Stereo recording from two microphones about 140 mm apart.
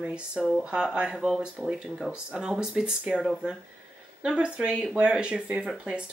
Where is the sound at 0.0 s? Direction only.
10° right (ahead or behind).